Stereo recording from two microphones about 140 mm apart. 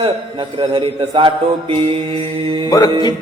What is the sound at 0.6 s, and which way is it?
Speech, 35° right (ahead or behind).